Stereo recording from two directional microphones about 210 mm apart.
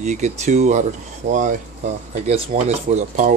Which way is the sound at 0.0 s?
35° right (ahead or behind).